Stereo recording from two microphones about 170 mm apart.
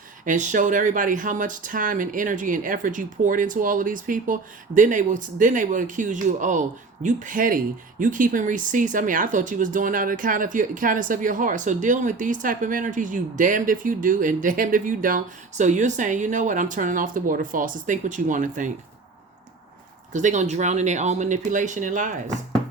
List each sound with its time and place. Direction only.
0.3 s speech: 50° right (ahead or behind)
20.1 s speech: 45° right (ahead or behind)